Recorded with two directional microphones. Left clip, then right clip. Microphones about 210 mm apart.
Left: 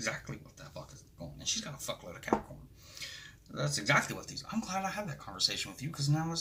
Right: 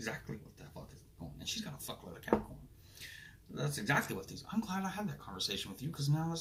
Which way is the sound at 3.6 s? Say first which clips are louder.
Left 5 dB; 35° left (ahead or behind).